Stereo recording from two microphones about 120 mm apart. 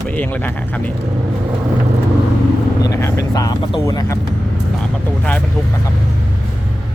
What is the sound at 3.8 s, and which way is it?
Speech, 25° left (ahead or behind).